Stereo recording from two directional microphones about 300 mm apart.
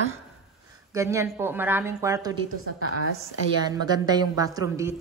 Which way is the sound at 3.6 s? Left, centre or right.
Centre.